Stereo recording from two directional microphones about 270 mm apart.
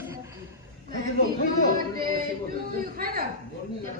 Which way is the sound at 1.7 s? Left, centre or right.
Right.